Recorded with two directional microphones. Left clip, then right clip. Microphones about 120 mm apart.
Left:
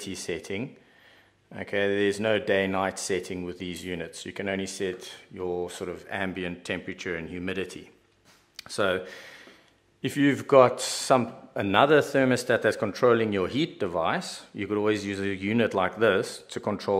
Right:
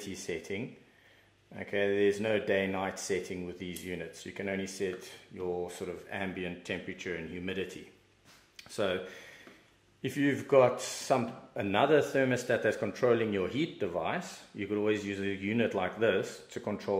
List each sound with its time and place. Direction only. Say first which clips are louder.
0.0 s speech: left 5 dB; 40° left (ahead or behind)